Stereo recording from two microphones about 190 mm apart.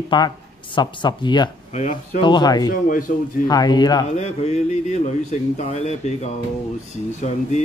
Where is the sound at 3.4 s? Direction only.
20° left (ahead or behind).